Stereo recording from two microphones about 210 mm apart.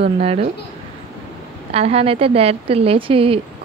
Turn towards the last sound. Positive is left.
turn(degrees=-25)  # may be behind; listen again after turning